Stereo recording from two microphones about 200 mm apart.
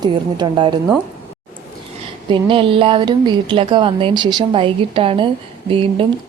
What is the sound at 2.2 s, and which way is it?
Speech, 25° right (ahead or behind).